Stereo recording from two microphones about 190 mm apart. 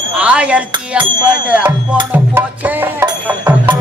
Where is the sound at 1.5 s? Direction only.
5° right (ahead or behind).